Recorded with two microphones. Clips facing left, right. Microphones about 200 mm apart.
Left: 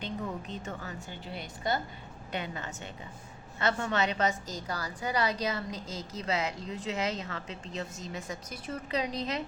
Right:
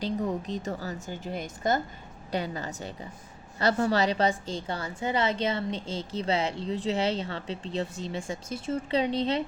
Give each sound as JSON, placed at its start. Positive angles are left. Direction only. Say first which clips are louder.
{"t": 0.0, "sound": "a woman's voice", "louder": "right 7 dB", "side_deg": -35}
{"t": 2.3, "sound": "a woman's voice", "louder": "right 6 dB", "side_deg": -35}